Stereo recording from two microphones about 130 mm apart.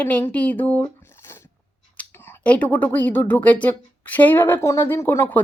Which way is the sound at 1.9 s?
20° left (ahead or behind).